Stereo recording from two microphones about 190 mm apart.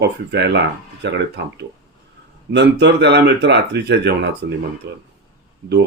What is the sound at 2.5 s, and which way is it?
Speech, 65° right (ahead or behind).